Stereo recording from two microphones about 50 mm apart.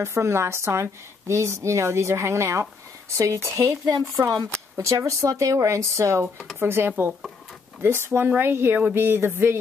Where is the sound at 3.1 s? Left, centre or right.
Right.